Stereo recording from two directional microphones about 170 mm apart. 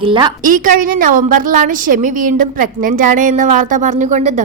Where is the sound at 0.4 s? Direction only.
55° right (ahead or behind).